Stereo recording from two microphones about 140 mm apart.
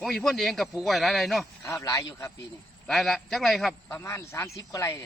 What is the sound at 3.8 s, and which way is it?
Speech, 15° left (ahead or behind).